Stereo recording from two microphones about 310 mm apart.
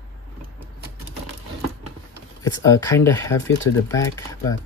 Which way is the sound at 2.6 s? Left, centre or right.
Centre.